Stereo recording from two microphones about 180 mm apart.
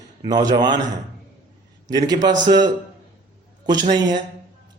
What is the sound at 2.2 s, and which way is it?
A man's voice, 20° right (ahead or behind).